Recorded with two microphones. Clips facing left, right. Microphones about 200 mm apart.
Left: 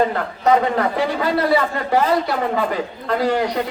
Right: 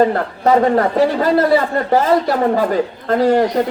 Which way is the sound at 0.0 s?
40° right (ahead or behind).